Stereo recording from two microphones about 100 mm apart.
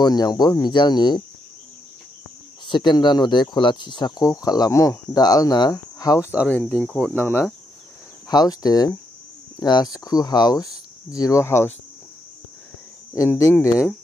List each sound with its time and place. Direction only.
0.0 s speech: 45° left (ahead or behind)
2.7 s speech: 50° left (ahead or behind)
6.7 s speech: 5° left (ahead or behind)
7.2 s speech: 15° left (ahead or behind)
8.3 s speech: 40° left (ahead or behind); by 11.7 s 25° left (ahead or behind)
13.3 s speech: 25° left (ahead or behind)